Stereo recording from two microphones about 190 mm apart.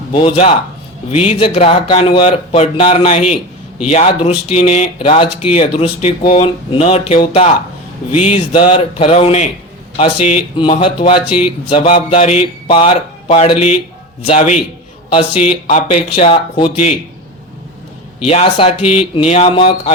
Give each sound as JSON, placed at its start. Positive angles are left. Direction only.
{"t": 0.1, "sound": "speech", "side_deg": 25}
{"t": 15.6, "sound": "speech", "side_deg": 30}
{"t": 18.3, "sound": "speech", "side_deg": 30}